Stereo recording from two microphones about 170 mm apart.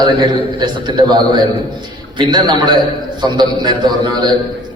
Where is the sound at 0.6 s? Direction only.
25° right (ahead or behind).